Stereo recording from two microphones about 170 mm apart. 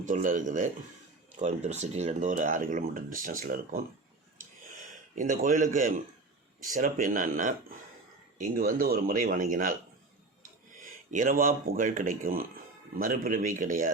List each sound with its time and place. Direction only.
0.0 s speech: 50° right (ahead or behind)
5.1 s a man's voice: 50° right (ahead or behind)
10.8 s speech: 50° right (ahead or behind)